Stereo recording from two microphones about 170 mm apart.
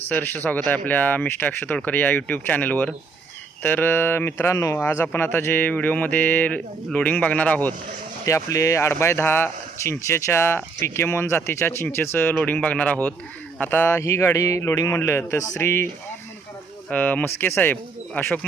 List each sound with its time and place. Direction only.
0.1 s speech: 10° left (ahead or behind)
8.2 s speech: 20° left (ahead or behind)
16.9 s speech: 10° left (ahead or behind)